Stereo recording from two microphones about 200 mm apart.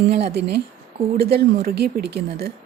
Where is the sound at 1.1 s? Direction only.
55° right (ahead or behind).